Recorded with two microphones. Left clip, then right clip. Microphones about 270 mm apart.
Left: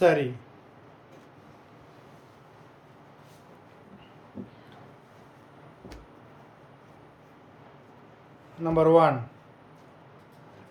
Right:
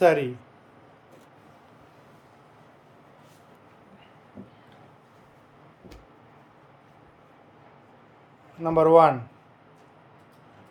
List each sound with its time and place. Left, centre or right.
0.0 s speech: centre
8.6 s speech: centre